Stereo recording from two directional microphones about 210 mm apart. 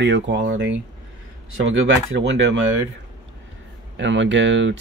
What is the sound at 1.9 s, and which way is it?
Speech, 60° right (ahead or behind).